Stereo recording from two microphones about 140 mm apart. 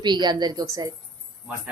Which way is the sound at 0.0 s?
30° right (ahead or behind).